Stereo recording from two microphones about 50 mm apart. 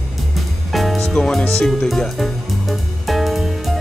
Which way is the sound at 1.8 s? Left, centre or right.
Centre.